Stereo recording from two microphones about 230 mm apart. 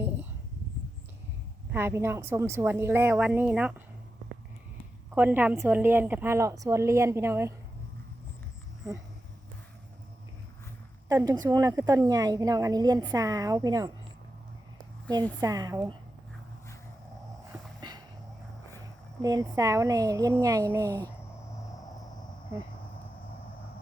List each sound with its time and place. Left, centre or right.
1.7 s a woman's voice: centre
5.1 s a woman's voice: centre
11.1 s a woman's voice: centre
15.1 s a woman's voice: centre
17.5 s a sound: centre
19.2 s a woman's voice: centre